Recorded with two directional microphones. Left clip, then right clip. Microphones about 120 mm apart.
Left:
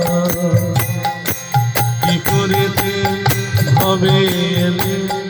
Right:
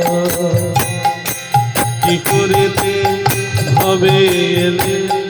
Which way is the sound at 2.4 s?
40° right (ahead or behind).